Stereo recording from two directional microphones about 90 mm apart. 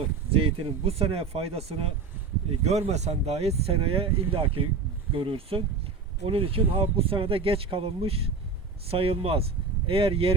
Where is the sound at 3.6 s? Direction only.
90° right.